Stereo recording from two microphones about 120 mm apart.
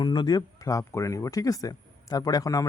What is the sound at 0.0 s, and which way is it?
Speech, 40° left (ahead or behind).